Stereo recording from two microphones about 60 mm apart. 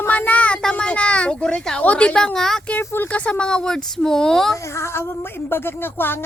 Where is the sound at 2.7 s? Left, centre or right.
Left; by 4.6 s centre.